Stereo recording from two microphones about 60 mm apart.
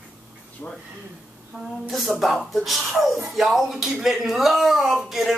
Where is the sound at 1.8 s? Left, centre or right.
Centre.